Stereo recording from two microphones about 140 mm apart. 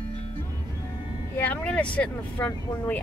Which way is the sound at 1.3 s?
10° left (ahead or behind).